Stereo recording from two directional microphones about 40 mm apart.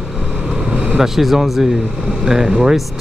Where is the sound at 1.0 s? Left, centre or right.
Centre.